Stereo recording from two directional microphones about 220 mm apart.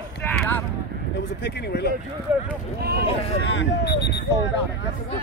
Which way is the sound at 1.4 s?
50° left (ahead or behind).